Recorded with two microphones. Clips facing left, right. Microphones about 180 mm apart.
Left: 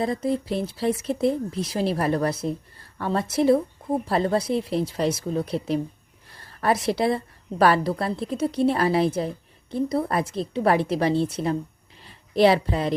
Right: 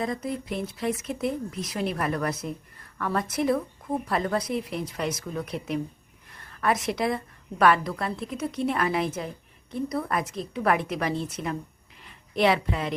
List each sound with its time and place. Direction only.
0.0 s a woman's voice: 30° left (ahead or behind)